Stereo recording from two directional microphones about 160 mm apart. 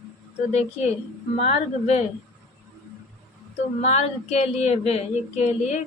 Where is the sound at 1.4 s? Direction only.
40° left (ahead or behind).